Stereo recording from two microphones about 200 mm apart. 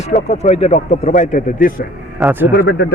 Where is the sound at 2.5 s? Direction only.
55° left (ahead or behind).